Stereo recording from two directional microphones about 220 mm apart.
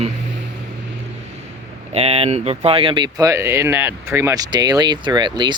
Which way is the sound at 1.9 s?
25° right (ahead or behind).